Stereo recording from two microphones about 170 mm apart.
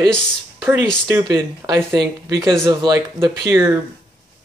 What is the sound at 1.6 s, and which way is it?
Speech, 20° right (ahead or behind).